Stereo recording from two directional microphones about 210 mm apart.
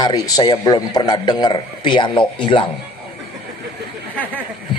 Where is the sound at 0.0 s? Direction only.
20° left (ahead or behind).